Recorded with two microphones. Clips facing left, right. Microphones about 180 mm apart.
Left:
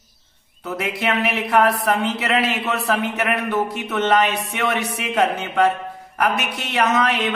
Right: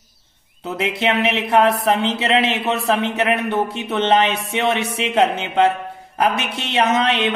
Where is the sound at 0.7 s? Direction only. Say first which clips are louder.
Right 3 dB; 25° right (ahead or behind).